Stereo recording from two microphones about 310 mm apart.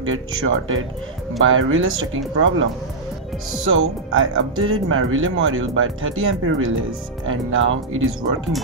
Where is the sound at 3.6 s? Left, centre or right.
Right.